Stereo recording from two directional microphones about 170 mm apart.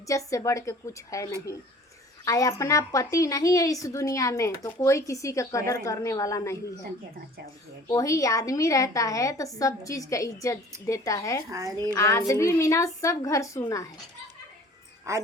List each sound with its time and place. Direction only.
0.1 s a woman's voice: 20° left (ahead or behind)
7.9 s a woman's voice: 20° left (ahead or behind)
11.5 s speech: 20° right (ahead or behind)
11.9 s a woman's voice: 15° left (ahead or behind)
15.1 s speech: 15° right (ahead or behind)